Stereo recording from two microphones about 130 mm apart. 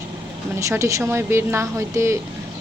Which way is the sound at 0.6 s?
25° right (ahead or behind).